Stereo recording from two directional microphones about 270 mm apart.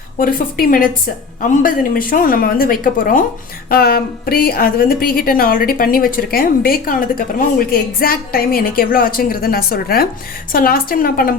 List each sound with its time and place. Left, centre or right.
0.2 s a woman's voice: left